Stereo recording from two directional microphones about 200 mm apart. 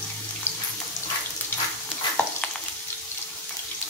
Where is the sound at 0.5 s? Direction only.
10° left (ahead or behind).